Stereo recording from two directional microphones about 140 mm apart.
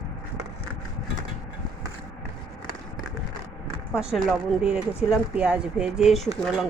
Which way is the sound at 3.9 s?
Centre (ahead or behind).